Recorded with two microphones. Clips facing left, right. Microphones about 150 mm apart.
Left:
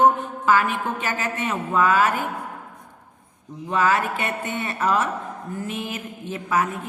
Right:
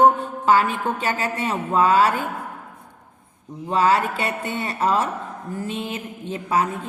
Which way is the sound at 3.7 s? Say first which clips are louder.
Right 2 dB; 35° right (ahead or behind).